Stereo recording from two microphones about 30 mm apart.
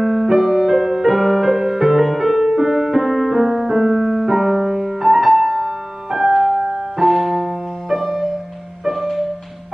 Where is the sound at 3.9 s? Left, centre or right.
Centre.